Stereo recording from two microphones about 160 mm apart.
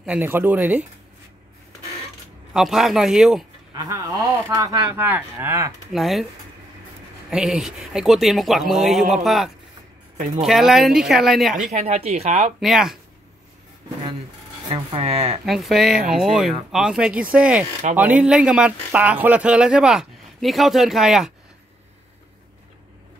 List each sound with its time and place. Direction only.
0.0 s speech: 10° right (ahead or behind)
2.5 s speech: centre (ahead or behind)
3.7 s speech: 20° right (ahead or behind)
5.9 s speech: centre (ahead or behind)
7.2 s speech: 5° right (ahead or behind)
10.1 s speech: 45° right (ahead or behind)
10.4 s speech: centre (ahead or behind)
11.7 s speech: 40° right (ahead or behind)
12.5 s speech: centre (ahead or behind)
14.7 s speech: 35° right (ahead or behind)
15.4 s speech: centre (ahead or behind)